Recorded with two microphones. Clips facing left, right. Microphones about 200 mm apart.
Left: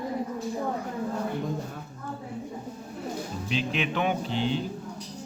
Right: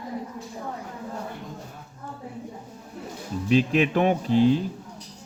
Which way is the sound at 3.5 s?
45° right (ahead or behind).